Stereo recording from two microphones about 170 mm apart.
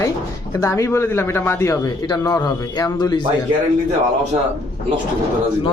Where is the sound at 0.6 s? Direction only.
15° left (ahead or behind).